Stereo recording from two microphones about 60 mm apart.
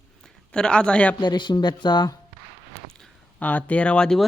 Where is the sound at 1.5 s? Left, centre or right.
Left.